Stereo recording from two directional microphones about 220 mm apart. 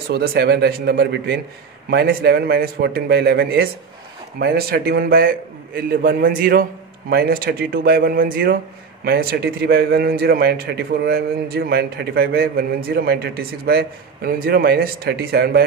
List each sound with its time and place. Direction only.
0.1 s a man's voice: 45° right (ahead or behind)